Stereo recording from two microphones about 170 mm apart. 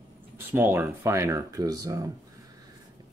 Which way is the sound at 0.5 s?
15° right (ahead or behind).